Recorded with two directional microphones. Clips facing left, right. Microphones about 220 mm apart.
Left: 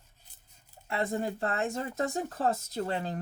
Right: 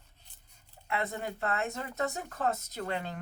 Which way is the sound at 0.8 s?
30° left (ahead or behind).